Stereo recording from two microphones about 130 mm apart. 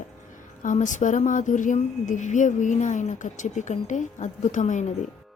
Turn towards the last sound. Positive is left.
turn(degrees=65)  # may be behind; listen again after turning